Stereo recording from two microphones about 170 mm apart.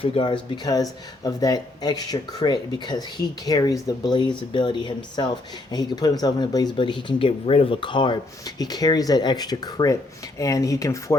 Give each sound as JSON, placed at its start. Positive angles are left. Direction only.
{"t": 0.0, "sound": "speech", "side_deg": 30}